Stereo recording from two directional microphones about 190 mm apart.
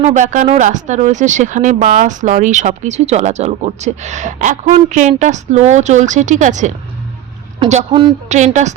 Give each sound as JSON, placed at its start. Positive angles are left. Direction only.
{"t": 0.0, "sound": "speech", "side_deg": -40}